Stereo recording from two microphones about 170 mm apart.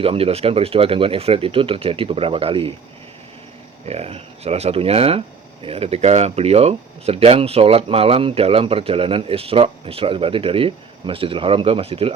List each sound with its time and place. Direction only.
0.0 s speech: 35° right (ahead or behind)
3.8 s speech: 35° right (ahead or behind)